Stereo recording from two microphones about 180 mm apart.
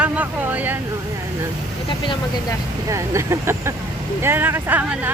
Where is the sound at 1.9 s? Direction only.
25° left (ahead or behind).